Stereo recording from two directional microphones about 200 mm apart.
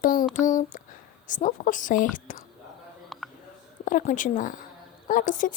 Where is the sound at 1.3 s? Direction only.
40° left (ahead or behind).